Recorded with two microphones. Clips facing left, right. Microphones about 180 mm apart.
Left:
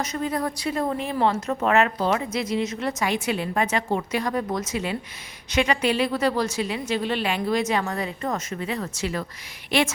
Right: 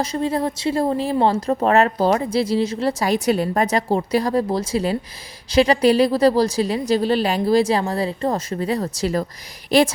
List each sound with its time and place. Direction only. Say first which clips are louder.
0.0 s a woman's voice: right 5 dB; 30° right (ahead or behind)